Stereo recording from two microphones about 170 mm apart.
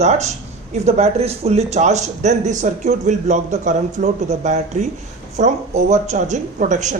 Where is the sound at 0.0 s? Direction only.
40° right (ahead or behind).